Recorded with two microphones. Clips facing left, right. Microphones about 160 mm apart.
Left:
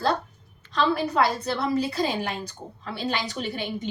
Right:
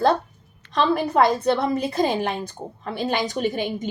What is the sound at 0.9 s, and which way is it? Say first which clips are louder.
A woman's voice: right 5 dB; 50° right (ahead or behind).